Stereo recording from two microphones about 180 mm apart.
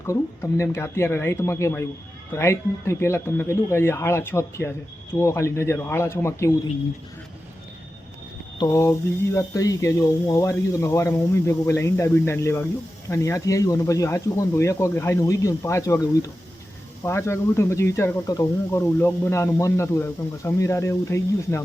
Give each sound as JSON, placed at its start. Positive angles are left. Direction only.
{"t": 0.1, "sound": "speech", "side_deg": 15}
{"t": 8.5, "sound": "speech", "side_deg": 20}